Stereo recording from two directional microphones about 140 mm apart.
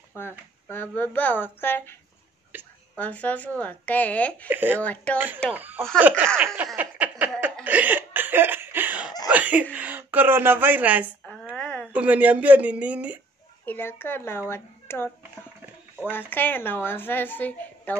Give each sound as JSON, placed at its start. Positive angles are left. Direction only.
{"t": 0.1, "sound": "a woman's voice", "side_deg": 15}
{"t": 2.5, "sound": "a woman's voice", "side_deg": -15}
{"t": 3.0, "sound": "a woman's voice", "side_deg": 10}
{"t": 4.5, "sound": "speech", "side_deg": -15}
{"t": 4.8, "sound": "a woman's voice", "side_deg": 10}
{"t": 5.5, "sound": "speech", "side_deg": -10}
{"t": 7.6, "sound": "hiccup", "side_deg": -10}
{"t": 9.3, "sound": "speech", "side_deg": -10}
{"t": 11.5, "sound": "a sound", "side_deg": 5}
{"t": 11.9, "sound": "speech", "side_deg": -10}
{"t": 13.7, "sound": "a woman's voice", "side_deg": 15}
{"t": 16.1, "sound": "a woman's voice", "side_deg": 15}